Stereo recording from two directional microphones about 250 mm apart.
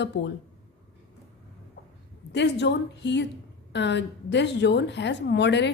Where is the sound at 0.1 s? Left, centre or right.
Left.